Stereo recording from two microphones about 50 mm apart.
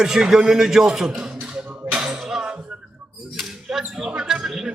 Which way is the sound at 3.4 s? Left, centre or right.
Centre.